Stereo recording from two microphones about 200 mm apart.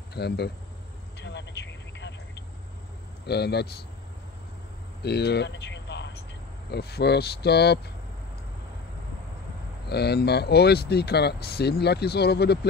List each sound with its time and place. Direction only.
0.1 s speech: 55° left (ahead or behind)
1.2 s vehicle: 60° left (ahead or behind)
3.3 s speech: 55° left (ahead or behind)
5.0 s a sound: 55° left (ahead or behind)
6.7 s speech: 55° left (ahead or behind)
9.8 s speech: 55° left (ahead or behind)